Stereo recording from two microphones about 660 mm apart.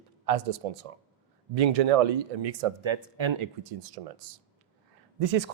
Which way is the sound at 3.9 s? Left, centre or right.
Right.